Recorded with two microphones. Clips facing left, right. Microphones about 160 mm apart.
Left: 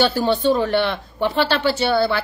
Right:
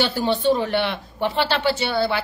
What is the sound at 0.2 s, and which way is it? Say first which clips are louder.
A woman's voice: left 2 dB; 15° right (ahead or behind).